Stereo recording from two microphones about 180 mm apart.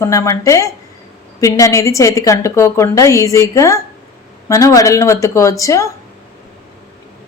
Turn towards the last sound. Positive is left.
turn(degrees=15)  # may be behind; listen again after turning